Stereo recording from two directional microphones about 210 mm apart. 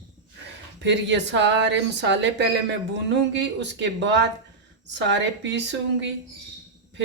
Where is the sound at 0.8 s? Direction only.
55° right (ahead or behind).